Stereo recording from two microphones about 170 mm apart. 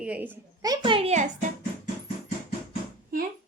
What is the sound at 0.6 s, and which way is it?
Speech, 25° right (ahead or behind).